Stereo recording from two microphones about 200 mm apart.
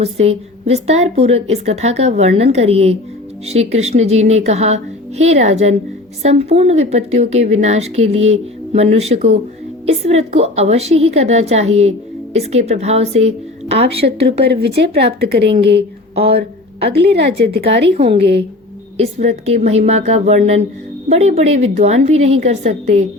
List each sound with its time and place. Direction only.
0.0 s a woman's voice: 30° right (ahead or behind)
14.4 s speech: 55° right (ahead or behind)
16.9 s speech: 55° right (ahead or behind)
17.9 s a woman's voice: 30° right (ahead or behind)
18.2 s speech: 60° right (ahead or behind)
18.9 s a woman's voice: 30° right (ahead or behind)